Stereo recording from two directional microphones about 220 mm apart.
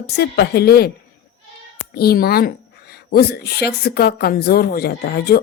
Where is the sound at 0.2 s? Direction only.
45° left (ahead or behind).